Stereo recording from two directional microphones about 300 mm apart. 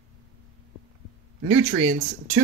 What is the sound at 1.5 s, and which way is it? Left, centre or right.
Speech, right.